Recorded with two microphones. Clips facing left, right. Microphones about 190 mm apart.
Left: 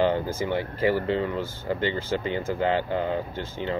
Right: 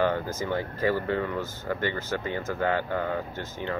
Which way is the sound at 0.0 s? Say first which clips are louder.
Left 3 dB; 20° left (ahead or behind).